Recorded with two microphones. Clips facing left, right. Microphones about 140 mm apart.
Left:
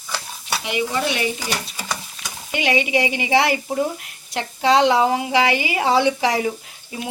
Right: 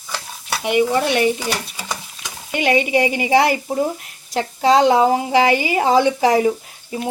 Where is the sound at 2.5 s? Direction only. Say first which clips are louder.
Right 3 dB; 45° right (ahead or behind).